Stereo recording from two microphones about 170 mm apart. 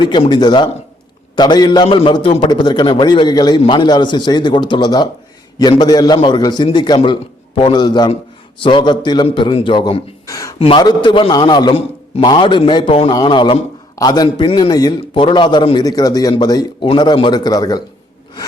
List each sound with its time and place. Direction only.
0.0 s a man's voice: 25° left (ahead or behind)